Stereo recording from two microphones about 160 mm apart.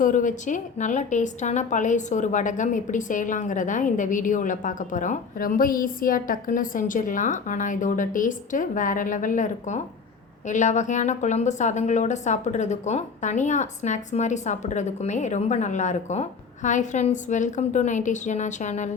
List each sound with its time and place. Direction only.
0.0 s a woman's voice: 55° left (ahead or behind)